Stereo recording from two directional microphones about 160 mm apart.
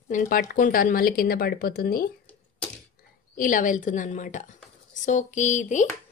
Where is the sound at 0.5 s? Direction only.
65° left (ahead or behind).